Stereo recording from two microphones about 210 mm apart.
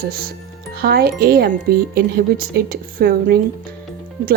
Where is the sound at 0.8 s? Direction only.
45° right (ahead or behind).